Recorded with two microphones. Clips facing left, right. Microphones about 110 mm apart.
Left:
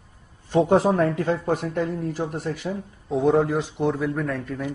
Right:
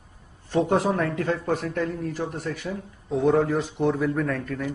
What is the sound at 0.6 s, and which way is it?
Speech, 30° left (ahead or behind).